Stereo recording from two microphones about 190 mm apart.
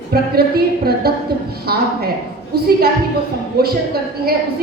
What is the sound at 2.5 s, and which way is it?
A woman's voice, 55° right (ahead or behind).